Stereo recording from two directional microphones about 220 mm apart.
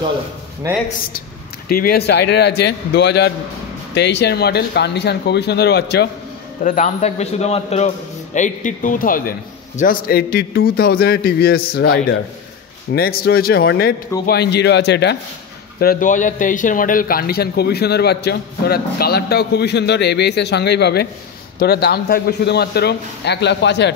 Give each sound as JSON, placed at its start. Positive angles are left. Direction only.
{"t": 1.7, "sound": "speech", "side_deg": 45}
{"t": 6.6, "sound": "a man's voice", "side_deg": 35}
{"t": 15.8, "sound": "speech", "side_deg": 40}